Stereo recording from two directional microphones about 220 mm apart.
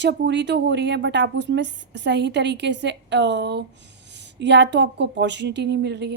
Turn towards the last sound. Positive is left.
turn(degrees=-50)  # may be behind; listen again after turning